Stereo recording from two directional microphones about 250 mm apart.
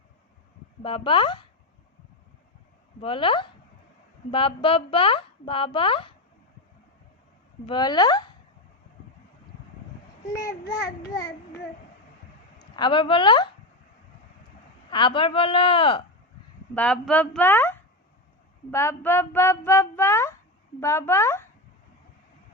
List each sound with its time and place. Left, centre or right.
0.8 s a woman's voice: left
3.0 s a woman's voice: left
7.7 s speech: centre
10.2 s speech: centre
12.7 s a woman's voice: centre
14.8 s a woman's voice: centre
16.7 s speech: centre